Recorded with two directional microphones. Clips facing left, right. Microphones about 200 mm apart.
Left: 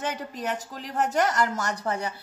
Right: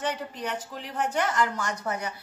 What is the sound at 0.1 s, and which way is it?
Speech, 40° left (ahead or behind).